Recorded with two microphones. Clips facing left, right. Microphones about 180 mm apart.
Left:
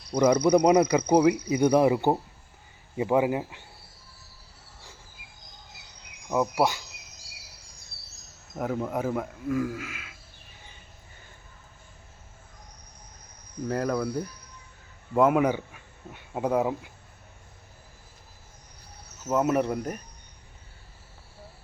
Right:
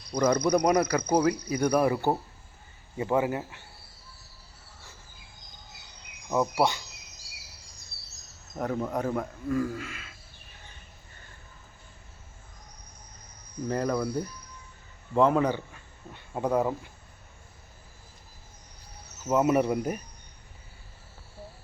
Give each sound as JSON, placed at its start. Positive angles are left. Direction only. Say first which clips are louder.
{"t": 0.2, "sound": "speech", "louder": "left 4 dB", "side_deg": 10}
{"t": 6.2, "sound": "speech", "louder": "left 1 dB", "side_deg": 5}
{"t": 8.5, "sound": "speech", "louder": "left 1 dB", "side_deg": 5}
{"t": 13.7, "sound": "speech", "louder": "left 1 dB", "side_deg": 0}
{"t": 19.2, "sound": "speech", "louder": "right 1 dB", "side_deg": -5}